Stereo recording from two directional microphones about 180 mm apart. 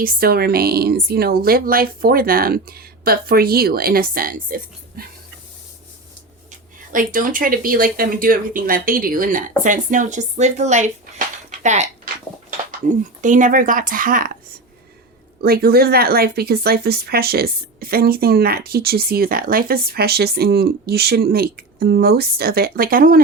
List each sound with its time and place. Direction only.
0.0 s speech: 55° right (ahead or behind)
6.9 s speech: 50° right (ahead or behind)
13.2 s speech: 45° right (ahead or behind)
15.4 s speech: 55° right (ahead or behind)